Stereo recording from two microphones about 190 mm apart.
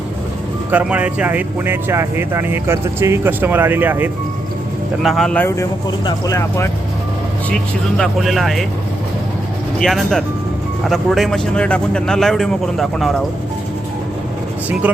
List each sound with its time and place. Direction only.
0.7 s speech: 10° right (ahead or behind)
5.0 s speech: centre (ahead or behind); by 6.7 s 15° left (ahead or behind)
7.5 s a man's voice: centre (ahead or behind)
9.8 s a man's voice: centre (ahead or behind)